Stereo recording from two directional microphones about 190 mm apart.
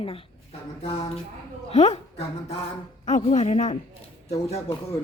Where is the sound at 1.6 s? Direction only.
35° left (ahead or behind).